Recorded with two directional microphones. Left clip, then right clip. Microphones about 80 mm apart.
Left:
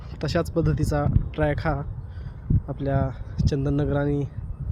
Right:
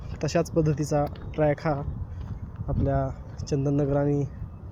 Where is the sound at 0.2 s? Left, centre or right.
Left.